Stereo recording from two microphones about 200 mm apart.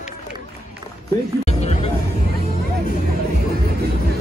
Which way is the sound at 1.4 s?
35° left (ahead or behind).